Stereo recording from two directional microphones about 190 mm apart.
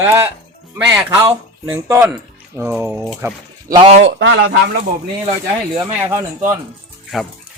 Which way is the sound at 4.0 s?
75° right (ahead or behind).